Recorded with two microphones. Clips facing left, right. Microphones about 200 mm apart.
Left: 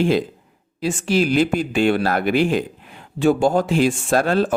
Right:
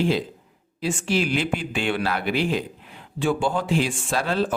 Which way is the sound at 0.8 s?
40° left (ahead or behind).